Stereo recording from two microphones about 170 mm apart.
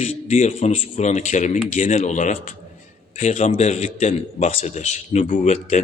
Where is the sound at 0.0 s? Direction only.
40° left (ahead or behind).